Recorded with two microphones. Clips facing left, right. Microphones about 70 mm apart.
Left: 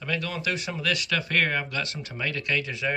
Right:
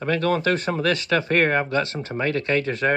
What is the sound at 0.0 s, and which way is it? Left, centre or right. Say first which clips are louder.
Speech: right 9 dB; right.